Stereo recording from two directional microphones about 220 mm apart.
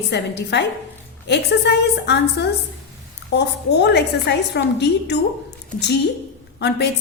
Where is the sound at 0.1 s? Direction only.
50° left (ahead or behind).